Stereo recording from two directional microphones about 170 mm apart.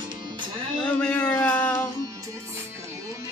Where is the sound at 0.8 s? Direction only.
10° left (ahead or behind).